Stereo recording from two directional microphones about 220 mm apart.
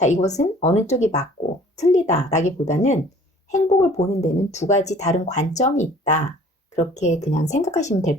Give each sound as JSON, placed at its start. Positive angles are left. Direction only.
{"t": 0.0, "sound": "speech", "side_deg": 30}